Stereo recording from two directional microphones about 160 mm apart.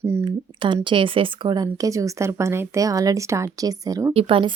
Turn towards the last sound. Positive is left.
turn(degrees=-35)  # may be behind; listen again after turning